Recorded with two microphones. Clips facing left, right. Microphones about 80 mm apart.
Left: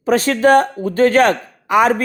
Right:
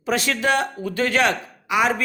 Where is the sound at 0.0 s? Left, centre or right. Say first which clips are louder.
Left 8 dB; left.